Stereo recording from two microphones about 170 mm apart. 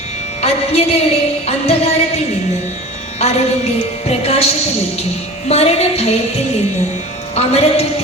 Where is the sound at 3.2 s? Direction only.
40° left (ahead or behind).